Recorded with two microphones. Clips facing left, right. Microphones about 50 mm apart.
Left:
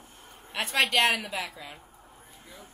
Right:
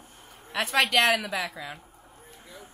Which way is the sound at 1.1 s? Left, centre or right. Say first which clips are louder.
Right 3 dB; right.